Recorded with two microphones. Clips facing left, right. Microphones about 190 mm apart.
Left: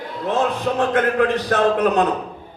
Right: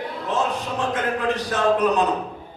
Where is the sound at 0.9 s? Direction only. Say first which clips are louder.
Left 5 dB; 60° left (ahead or behind).